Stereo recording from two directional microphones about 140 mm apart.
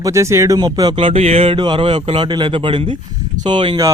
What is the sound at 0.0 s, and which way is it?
Speech, 20° right (ahead or behind).